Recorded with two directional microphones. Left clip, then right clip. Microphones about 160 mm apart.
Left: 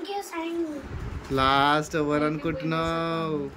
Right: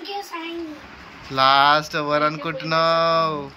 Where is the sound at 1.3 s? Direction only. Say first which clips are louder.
Right 6 dB; 20° left (ahead or behind).